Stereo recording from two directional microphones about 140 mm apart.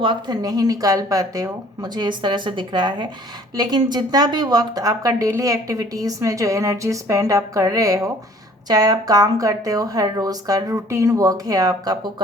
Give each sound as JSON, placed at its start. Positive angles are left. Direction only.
{"t": 0.0, "sound": "speech", "side_deg": -30}